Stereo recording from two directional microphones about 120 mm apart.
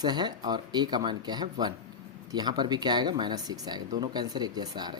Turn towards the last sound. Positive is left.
turn(degrees=-35)  # may be behind; listen again after turning